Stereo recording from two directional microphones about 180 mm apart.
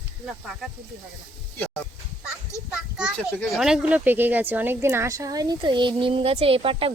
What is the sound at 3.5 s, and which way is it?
A woman's voice, 5° right (ahead or behind).